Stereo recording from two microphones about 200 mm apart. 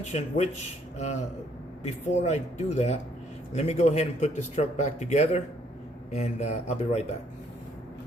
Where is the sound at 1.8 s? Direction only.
35° left (ahead or behind).